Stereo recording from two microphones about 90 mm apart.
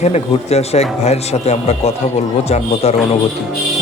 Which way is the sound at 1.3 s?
90° left.